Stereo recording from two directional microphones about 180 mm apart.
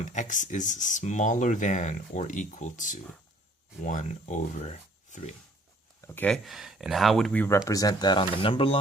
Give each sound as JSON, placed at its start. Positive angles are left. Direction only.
{"t": 0.0, "sound": "speech", "side_deg": 40}
{"t": 6.1, "sound": "speech", "side_deg": 10}
{"t": 7.4, "sound": "speech", "side_deg": 15}